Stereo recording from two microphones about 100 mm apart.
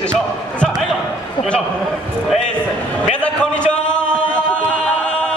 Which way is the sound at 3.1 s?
10° left (ahead or behind).